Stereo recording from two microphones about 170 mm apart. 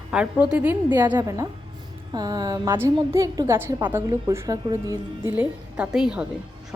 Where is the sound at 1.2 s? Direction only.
20° right (ahead or behind).